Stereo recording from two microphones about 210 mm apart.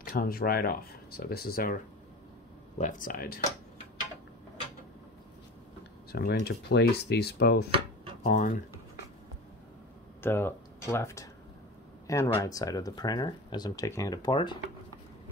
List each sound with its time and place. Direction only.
0.1 s speech: 45° left (ahead or behind)
2.8 s speech: 40° left (ahead or behind)
6.1 s speech: 50° left (ahead or behind)
8.2 s speech: 40° left (ahead or behind)
10.2 s speech: 10° left (ahead or behind)
12.4 s speech: 15° left (ahead or behind)